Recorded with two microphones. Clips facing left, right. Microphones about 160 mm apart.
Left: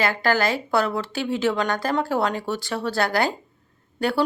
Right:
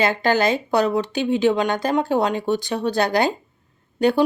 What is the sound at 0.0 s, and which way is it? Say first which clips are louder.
Speech: right 3 dB; 20° right (ahead or behind).